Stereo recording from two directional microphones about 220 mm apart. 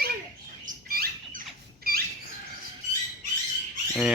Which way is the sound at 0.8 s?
40° right (ahead or behind).